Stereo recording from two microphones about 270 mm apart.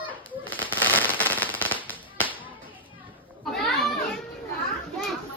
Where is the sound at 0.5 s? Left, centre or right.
Centre.